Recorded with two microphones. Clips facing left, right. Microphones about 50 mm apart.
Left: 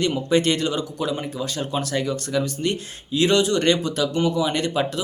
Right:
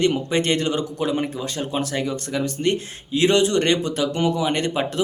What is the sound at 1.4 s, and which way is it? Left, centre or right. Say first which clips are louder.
Speech: even; right.